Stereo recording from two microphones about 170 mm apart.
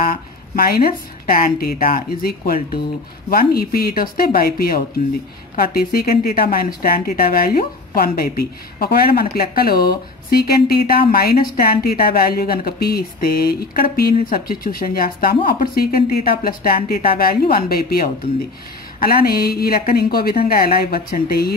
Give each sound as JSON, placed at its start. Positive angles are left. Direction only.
{"t": 0.0, "sound": "speech", "side_deg": 55}